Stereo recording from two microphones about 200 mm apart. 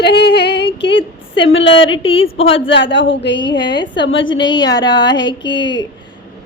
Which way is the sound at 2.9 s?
65° left (ahead or behind).